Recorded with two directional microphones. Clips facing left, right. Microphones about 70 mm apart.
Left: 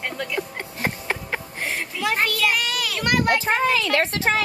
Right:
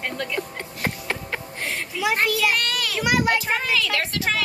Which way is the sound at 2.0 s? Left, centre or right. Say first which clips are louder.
Right 1 dB; centre.